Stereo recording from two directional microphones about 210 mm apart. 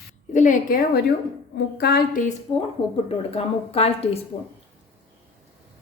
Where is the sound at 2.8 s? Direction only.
25° left (ahead or behind).